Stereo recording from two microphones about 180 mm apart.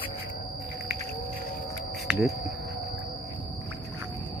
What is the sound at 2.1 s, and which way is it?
Speech, centre (ahead or behind).